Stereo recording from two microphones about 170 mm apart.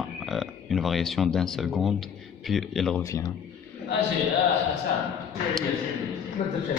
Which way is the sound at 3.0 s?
20° left (ahead or behind).